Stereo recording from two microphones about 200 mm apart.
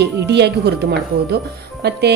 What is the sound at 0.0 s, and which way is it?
Speech, 55° right (ahead or behind).